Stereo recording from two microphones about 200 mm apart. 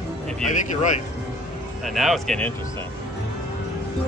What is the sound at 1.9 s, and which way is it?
Speech, centre (ahead or behind).